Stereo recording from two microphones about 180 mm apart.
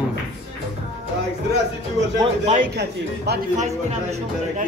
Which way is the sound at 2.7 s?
65° right (ahead or behind).